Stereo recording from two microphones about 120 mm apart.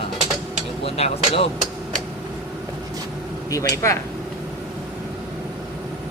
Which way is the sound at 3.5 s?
25° left (ahead or behind).